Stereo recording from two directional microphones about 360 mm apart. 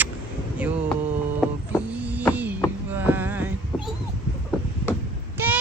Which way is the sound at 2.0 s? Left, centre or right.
Centre.